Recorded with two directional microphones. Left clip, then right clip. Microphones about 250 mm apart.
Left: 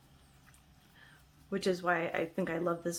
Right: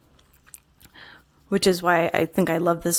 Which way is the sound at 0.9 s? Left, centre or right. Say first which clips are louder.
Right 14 dB; right.